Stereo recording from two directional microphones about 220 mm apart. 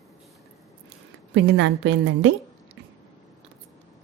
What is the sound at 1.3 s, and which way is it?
A woman's voice, 55° right (ahead or behind).